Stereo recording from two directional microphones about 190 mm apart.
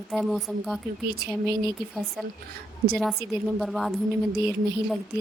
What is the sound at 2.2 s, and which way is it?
Speech, centre (ahead or behind).